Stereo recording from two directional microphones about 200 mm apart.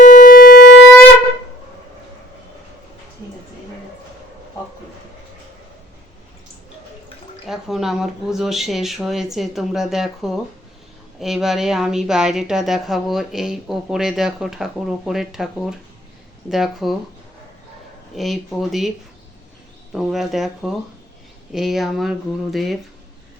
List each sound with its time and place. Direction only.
0.0 s siren: 40° left (ahead or behind)
7.4 s a woman's voice: centre (ahead or behind)
18.1 s a woman's voice: centre (ahead or behind)
19.9 s a woman's voice: 5° right (ahead or behind)